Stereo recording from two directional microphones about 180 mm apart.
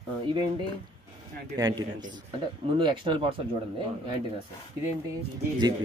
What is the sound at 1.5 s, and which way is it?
A man's voice, 20° right (ahead or behind).